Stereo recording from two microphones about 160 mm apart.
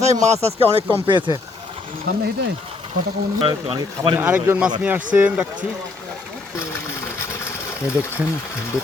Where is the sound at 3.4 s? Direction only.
35° right (ahead or behind).